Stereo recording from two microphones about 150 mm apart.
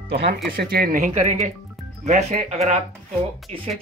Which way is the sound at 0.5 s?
80° right.